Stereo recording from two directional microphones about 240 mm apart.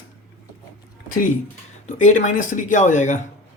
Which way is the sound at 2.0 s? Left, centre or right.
Left.